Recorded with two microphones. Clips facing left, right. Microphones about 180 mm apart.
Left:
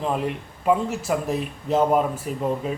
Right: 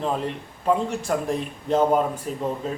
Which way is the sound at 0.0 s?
5° left (ahead or behind).